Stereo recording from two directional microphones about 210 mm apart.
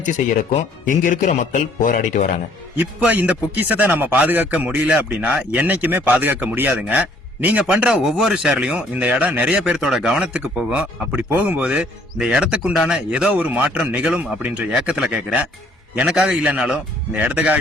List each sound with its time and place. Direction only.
0.0 s a man's voice: 35° left (ahead or behind)
2.7 s a man's voice: 5° right (ahead or behind)